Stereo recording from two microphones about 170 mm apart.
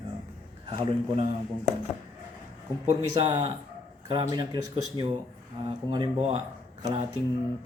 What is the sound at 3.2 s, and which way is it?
A man's voice, 30° right (ahead or behind).